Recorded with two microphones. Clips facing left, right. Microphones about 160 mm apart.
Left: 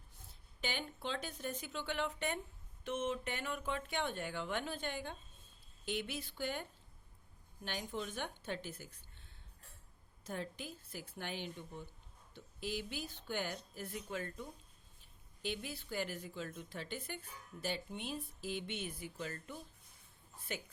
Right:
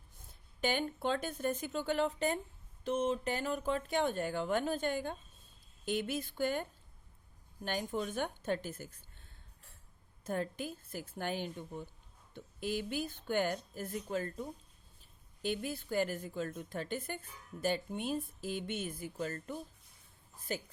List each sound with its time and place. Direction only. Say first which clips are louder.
0.6 s speech: right 8 dB; 50° right (ahead or behind)
10.2 s speech: right 7 dB; 50° right (ahead or behind)